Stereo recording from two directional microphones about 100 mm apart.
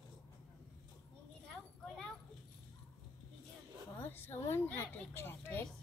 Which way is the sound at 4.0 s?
25° left (ahead or behind).